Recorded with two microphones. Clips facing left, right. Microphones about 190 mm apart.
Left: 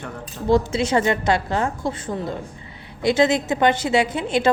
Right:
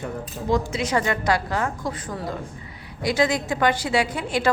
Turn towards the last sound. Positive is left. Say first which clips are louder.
# left 3 dB
turn(degrees=25)  # may be behind; listen again after turning